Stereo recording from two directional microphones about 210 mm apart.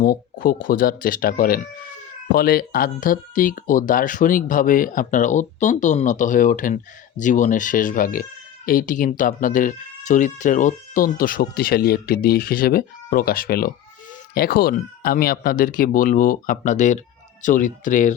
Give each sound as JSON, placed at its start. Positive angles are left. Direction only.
{"t": 0.0, "sound": "speech", "side_deg": 40}